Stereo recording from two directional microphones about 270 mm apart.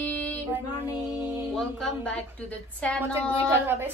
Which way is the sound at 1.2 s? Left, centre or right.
Centre.